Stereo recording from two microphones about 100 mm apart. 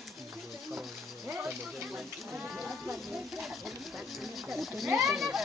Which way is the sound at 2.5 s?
5° right (ahead or behind).